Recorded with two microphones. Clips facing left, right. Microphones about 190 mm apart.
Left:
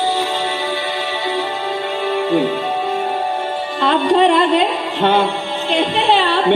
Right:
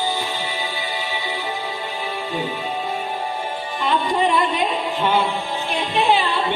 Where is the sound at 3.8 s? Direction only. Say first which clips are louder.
Left 7 dB; 75° left (ahead or behind).